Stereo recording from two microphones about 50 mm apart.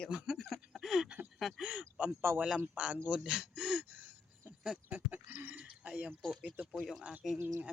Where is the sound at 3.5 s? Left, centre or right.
Centre.